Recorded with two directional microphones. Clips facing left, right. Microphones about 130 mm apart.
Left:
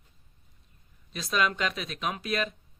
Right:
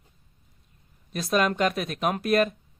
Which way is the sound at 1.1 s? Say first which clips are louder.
Right 5 dB; 50° right (ahead or behind).